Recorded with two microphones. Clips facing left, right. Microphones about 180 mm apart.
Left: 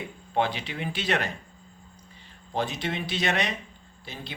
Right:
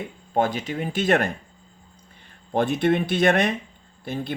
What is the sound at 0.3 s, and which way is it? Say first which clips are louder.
Speech: right 4 dB; 45° right (ahead or behind).